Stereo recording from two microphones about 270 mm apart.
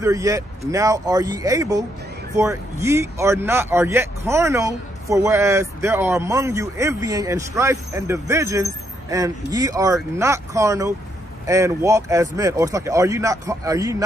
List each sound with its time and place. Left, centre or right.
0.0 s speech: centre